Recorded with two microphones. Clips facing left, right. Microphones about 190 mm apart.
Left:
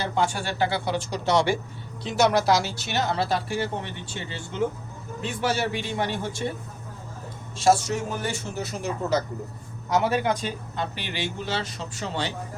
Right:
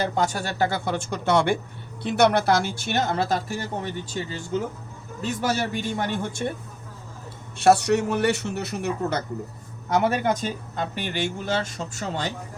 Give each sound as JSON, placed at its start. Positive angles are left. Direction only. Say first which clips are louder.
{"t": 0.0, "sound": "speech", "louder": "right 1 dB", "side_deg": -40}
{"t": 7.6, "sound": "a man's voice", "louder": "right 3 dB", "side_deg": -65}
{"t": 10.0, "sound": "speech", "louder": "right 2 dB", "side_deg": -45}